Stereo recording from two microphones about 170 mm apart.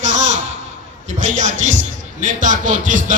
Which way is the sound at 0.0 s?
45° right (ahead or behind).